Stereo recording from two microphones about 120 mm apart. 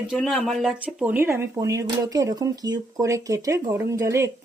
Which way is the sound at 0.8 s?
15° right (ahead or behind).